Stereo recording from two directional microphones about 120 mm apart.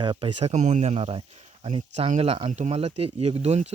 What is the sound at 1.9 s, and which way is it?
Speech, 65° right (ahead or behind).